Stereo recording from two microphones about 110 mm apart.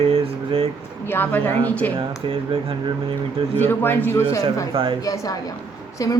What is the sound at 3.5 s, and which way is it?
Speech, 20° left (ahead or behind).